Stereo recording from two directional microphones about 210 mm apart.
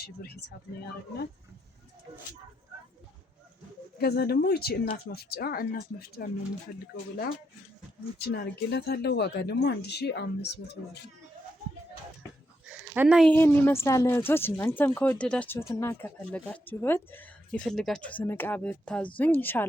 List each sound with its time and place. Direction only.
0.0 s speech: 50° left (ahead or behind)
3.9 s speech: 45° left (ahead or behind)
8.3 s speech: 50° left (ahead or behind)
12.6 s sheep: 5° right (ahead or behind)
13.3 s speech: 10° left (ahead or behind)